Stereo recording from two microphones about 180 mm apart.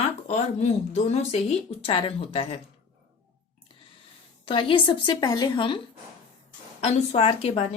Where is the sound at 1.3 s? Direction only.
35° left (ahead or behind).